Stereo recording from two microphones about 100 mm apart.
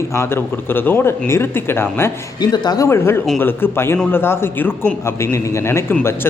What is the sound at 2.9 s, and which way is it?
Speech, 25° left (ahead or behind).